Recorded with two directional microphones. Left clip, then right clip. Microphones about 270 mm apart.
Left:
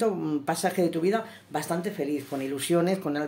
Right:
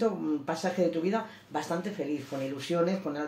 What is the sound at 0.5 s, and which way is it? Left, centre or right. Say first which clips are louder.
Speech: left 3 dB; left.